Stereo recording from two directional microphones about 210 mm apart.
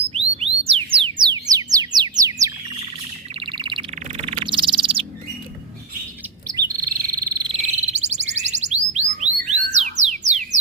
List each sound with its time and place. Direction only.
0.1 s music: 30° right (ahead or behind)
3.4 s bird: 25° right (ahead or behind)
6.7 s frog: 15° right (ahead or behind)
7.5 s a sound: 30° right (ahead or behind)
9.7 s music: 30° right (ahead or behind)